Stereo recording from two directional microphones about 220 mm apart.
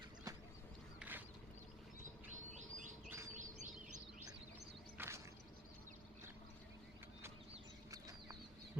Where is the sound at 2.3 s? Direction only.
35° right (ahead or behind).